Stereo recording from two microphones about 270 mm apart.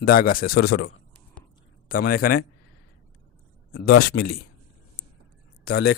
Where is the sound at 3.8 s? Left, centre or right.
Left.